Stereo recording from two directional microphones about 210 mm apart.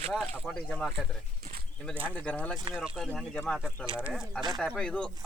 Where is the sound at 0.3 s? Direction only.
Centre (ahead or behind).